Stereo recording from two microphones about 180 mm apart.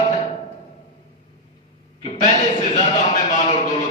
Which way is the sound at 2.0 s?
40° left (ahead or behind).